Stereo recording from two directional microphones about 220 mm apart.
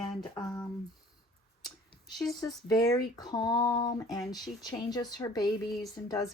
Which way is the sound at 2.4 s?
15° left (ahead or behind).